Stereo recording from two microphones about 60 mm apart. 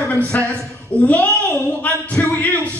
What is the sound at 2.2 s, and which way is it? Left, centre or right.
Music, left.